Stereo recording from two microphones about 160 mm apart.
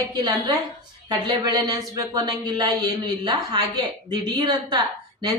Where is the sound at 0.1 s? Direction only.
25° right (ahead or behind).